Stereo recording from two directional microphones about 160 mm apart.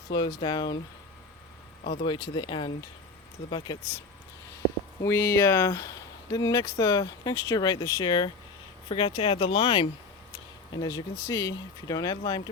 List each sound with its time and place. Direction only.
0.2 s speech: 25° left (ahead or behind)
2.0 s speech: 30° left (ahead or behind)
5.0 s speech: 20° left (ahead or behind)